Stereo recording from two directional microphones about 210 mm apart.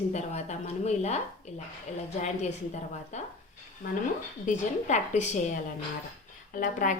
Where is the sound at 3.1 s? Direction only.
35° left (ahead or behind).